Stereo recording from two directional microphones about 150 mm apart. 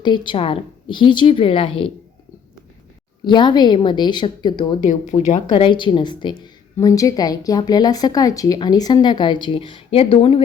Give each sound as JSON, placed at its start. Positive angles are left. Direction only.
{"t": 0.0, "sound": "a woman's voice", "side_deg": 30}
{"t": 3.2, "sound": "a woman's voice", "side_deg": 30}
{"t": 4.8, "sound": "speech", "side_deg": 60}
{"t": 5.5, "sound": "a woman's voice", "side_deg": 35}